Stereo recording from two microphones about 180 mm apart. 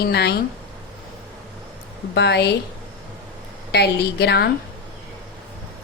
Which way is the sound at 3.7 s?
70° left (ahead or behind).